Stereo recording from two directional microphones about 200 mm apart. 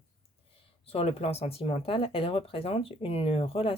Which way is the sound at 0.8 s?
30° left (ahead or behind).